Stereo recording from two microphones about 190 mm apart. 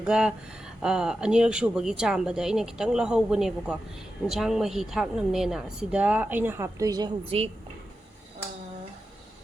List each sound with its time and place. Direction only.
0.0 s a woman's voice: 5° right (ahead or behind); by 7.5 s 30° right (ahead or behind)